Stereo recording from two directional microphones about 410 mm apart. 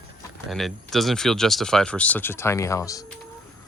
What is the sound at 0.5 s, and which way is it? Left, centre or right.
Speech, centre.